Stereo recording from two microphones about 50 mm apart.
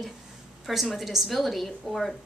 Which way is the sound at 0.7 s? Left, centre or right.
Centre.